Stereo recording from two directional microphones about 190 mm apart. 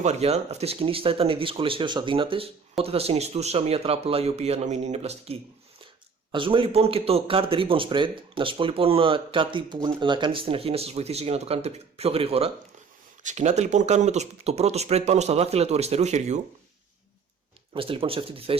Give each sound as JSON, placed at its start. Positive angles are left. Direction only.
{"t": 0.0, "sound": "speech", "side_deg": -35}
{"t": 17.7, "sound": "speech", "side_deg": -30}